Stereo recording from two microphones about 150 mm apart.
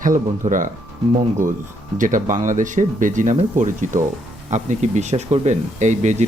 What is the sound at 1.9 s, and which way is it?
Speech, 60° right (ahead or behind).